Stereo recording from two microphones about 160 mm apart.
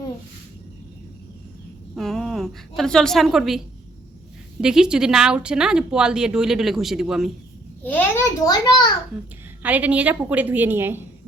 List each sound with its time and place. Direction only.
2.0 s speech: centre (ahead or behind)
4.6 s speech: 5° right (ahead or behind)
7.9 s a child's voice: 15° left (ahead or behind)
8.6 s a child's voice: 30° left (ahead or behind)
9.6 s a woman's voice: 10° right (ahead or behind)